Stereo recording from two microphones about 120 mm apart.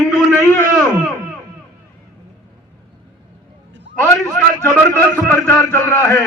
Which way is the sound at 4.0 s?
20° left (ahead or behind).